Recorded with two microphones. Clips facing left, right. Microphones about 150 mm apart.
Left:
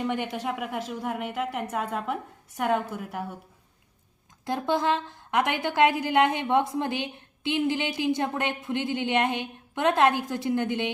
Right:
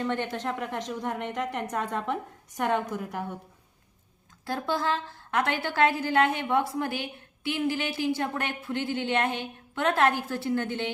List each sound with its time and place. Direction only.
0.0 s a woman's voice: 10° left (ahead or behind)
4.4 s a woman's voice: 20° left (ahead or behind)